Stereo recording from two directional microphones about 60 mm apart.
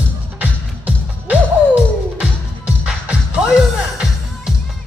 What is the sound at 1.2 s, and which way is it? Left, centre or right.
Music, right.